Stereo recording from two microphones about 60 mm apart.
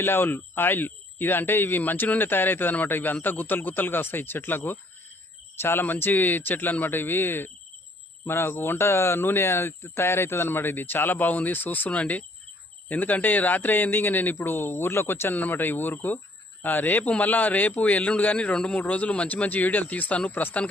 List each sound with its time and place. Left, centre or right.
0.0 s a man's voice: left